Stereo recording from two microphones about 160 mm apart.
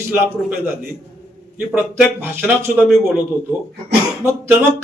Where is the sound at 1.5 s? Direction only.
10° right (ahead or behind).